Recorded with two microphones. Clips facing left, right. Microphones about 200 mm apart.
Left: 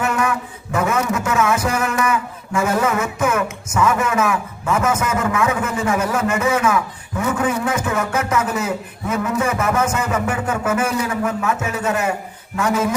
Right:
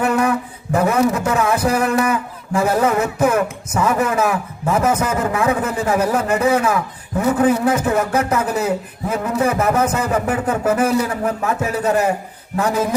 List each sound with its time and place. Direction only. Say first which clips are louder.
0.0 s a man's voice: right 4 dB; 35° right (ahead or behind)